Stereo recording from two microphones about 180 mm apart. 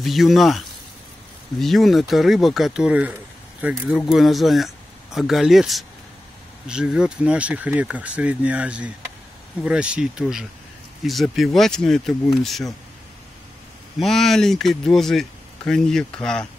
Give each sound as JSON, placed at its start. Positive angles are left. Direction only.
{"t": 0.0, "sound": "speech", "side_deg": 0}
{"t": 13.9, "sound": "speech", "side_deg": 0}